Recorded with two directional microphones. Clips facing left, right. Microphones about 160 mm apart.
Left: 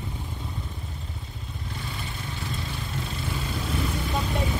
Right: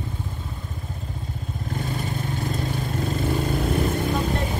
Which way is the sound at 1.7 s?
45° right (ahead or behind).